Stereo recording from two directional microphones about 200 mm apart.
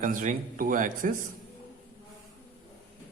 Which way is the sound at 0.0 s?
40° right (ahead or behind).